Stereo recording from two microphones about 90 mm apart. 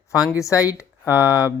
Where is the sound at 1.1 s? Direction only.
20° right (ahead or behind).